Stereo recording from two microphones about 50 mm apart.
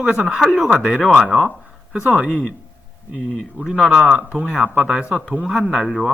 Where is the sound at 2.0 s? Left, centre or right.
Centre.